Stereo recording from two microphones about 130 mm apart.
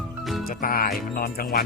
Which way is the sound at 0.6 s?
90° left.